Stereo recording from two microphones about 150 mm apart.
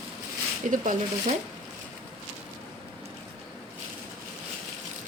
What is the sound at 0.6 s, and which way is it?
Speech, 55° right (ahead or behind).